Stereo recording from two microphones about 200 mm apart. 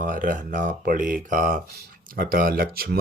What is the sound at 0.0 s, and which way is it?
Speech, 40° right (ahead or behind).